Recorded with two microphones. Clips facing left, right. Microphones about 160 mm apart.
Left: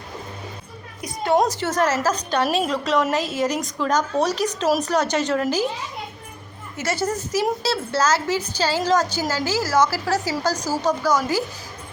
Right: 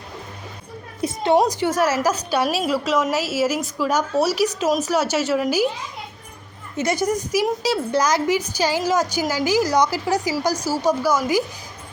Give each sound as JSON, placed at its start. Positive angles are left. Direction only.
{"t": 1.0, "sound": "a woman's voice", "side_deg": -20}
{"t": 6.7, "sound": "a woman's voice", "side_deg": -15}